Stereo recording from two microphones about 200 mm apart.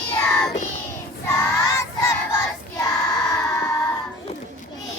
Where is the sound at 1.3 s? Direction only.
15° left (ahead or behind).